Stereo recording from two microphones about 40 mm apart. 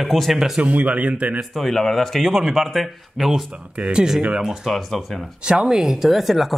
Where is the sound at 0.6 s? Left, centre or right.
Right.